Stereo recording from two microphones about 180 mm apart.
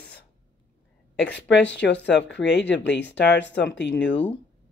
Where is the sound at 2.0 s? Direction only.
75° left (ahead or behind).